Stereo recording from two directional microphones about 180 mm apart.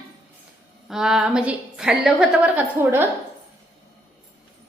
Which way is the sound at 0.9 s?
5° right (ahead or behind).